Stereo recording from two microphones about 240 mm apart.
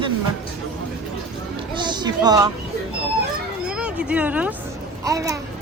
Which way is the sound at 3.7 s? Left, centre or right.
Centre.